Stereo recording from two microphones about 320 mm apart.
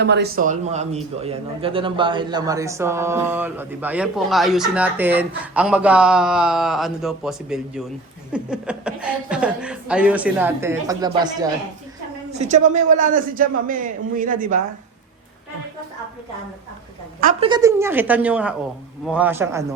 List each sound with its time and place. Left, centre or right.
0.0 s a man's voice: right
17.2 s a man's voice: right
17.5 s a man's voice: centre